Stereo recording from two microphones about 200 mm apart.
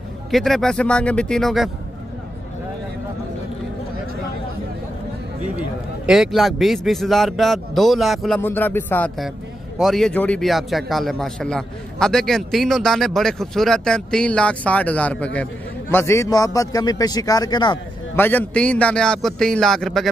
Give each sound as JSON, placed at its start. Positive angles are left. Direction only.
{"t": 0.3, "sound": "a man's voice", "side_deg": 0}
{"t": 5.6, "sound": "a man's voice", "side_deg": -5}
{"t": 8.4, "sound": "a man's voice", "side_deg": 10}
{"t": 18.1, "sound": "a man's voice", "side_deg": 10}